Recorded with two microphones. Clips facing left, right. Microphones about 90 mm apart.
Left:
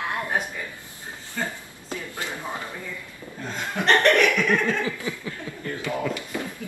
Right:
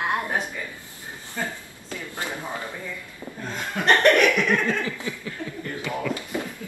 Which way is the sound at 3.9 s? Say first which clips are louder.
Right 1 dB; 20° right (ahead or behind).